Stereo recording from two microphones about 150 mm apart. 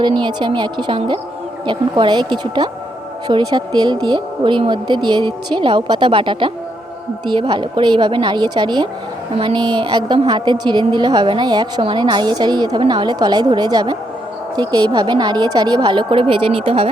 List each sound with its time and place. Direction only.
0.0 s a woman's voice: 30° right (ahead or behind)